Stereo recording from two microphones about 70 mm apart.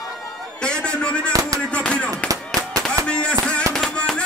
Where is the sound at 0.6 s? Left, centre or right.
Centre.